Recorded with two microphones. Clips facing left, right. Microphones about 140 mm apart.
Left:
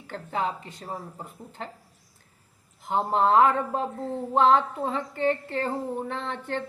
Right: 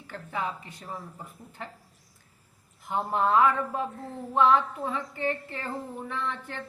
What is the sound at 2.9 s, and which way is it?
Speech, 30° left (ahead or behind).